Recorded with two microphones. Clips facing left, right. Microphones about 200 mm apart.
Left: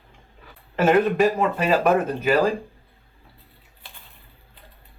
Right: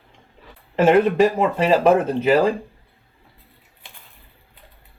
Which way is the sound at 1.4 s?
25° right (ahead or behind).